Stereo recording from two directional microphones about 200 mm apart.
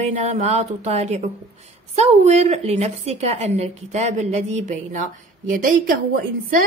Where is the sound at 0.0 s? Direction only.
35° right (ahead or behind).